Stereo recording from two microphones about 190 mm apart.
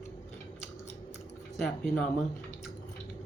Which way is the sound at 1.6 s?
5° left (ahead or behind).